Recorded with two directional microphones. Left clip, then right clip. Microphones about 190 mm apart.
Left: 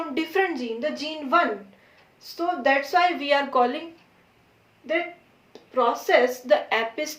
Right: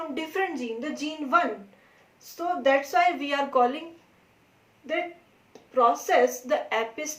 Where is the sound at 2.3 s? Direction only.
20° left (ahead or behind).